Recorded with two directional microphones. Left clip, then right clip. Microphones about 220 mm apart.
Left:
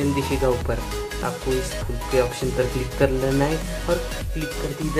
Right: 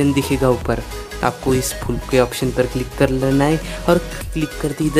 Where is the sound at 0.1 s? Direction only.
35° right (ahead or behind).